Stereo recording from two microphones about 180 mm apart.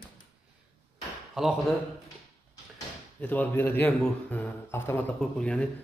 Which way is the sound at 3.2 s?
10° left (ahead or behind).